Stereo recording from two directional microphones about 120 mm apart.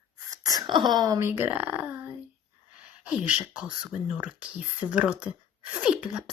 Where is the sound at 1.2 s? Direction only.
20° right (ahead or behind).